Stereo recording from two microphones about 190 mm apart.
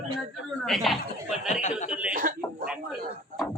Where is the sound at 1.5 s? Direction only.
40° left (ahead or behind).